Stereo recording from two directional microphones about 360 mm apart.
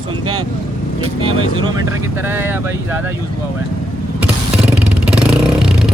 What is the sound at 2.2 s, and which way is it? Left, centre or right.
Speech, centre.